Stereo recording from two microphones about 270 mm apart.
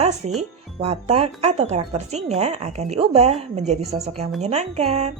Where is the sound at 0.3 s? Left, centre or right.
Right.